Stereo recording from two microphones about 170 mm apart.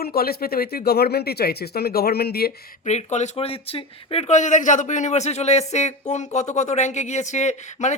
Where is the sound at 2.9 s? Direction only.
40° left (ahead or behind).